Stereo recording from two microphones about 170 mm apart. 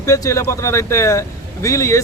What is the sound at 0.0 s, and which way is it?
Speech, 20° left (ahead or behind).